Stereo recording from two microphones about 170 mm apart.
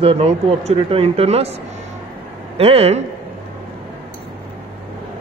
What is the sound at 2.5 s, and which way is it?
Speech, 35° right (ahead or behind).